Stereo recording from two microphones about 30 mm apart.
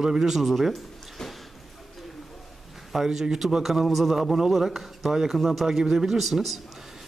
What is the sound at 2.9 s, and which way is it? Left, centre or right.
A man's voice, centre.